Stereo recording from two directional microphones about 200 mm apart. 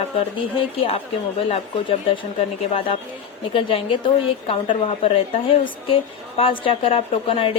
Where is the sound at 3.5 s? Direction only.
25° left (ahead or behind).